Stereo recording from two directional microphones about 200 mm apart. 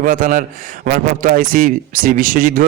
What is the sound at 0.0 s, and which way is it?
A man's voice, 40° right (ahead or behind).